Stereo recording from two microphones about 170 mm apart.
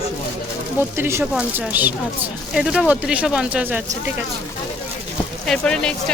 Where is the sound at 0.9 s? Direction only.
15° right (ahead or behind).